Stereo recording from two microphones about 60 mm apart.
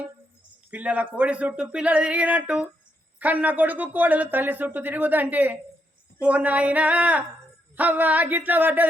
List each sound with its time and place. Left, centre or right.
0.7 s speech: right